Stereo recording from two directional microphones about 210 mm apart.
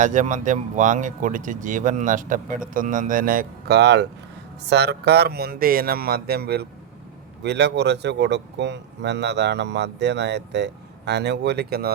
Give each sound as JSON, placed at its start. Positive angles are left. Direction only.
{"t": 0.0, "sound": "speech", "side_deg": -35}